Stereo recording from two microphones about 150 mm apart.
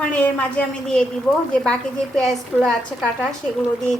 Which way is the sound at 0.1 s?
10° left (ahead or behind).